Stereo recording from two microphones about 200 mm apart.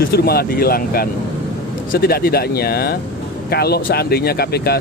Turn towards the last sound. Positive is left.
turn(degrees=50)  # may be behind; listen again after turning